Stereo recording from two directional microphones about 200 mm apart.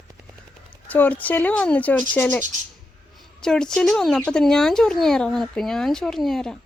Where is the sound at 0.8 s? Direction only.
10° left (ahead or behind).